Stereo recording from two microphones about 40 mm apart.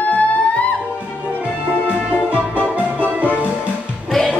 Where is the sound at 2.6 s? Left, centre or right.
Right.